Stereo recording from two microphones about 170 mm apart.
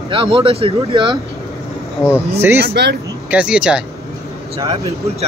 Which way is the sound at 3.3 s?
5° right (ahead or behind).